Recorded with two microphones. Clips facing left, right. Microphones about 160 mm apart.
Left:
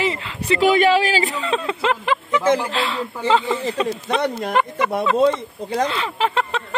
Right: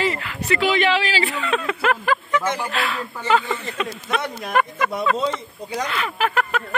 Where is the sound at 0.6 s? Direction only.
45° left (ahead or behind).